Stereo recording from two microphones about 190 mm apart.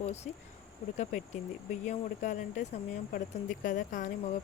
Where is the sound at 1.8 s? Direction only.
40° left (ahead or behind).